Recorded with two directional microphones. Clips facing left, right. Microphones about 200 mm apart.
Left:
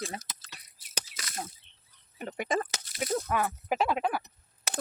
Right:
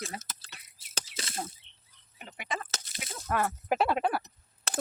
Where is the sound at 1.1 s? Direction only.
30° right (ahead or behind).